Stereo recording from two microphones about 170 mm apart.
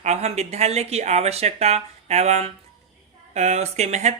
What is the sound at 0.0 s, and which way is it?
Speech, 40° right (ahead or behind).